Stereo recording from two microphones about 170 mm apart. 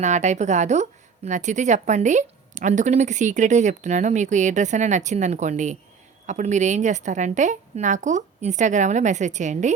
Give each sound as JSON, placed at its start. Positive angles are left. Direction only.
{"t": 0.0, "sound": "a woman's voice", "side_deg": -45}